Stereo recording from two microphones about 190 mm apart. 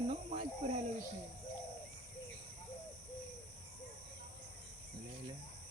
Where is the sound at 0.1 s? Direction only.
30° right (ahead or behind).